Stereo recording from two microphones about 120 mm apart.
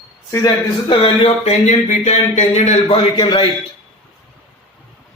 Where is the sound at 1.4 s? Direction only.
80° left.